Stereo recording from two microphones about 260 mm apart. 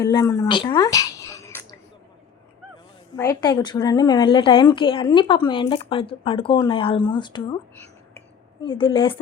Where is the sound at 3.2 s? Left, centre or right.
Centre.